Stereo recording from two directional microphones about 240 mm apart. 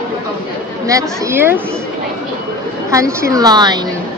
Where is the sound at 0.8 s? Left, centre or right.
Centre.